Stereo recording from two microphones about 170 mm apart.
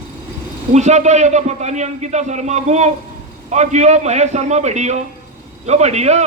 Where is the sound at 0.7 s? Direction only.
45° right (ahead or behind).